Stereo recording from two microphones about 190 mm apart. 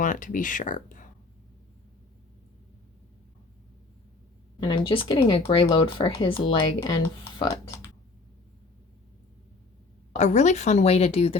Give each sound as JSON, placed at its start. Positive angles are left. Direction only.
{"t": 0.0, "sound": "speech", "side_deg": 45}
{"t": 4.6, "sound": "speech", "side_deg": 25}
{"t": 10.1, "sound": "a woman's voice", "side_deg": 40}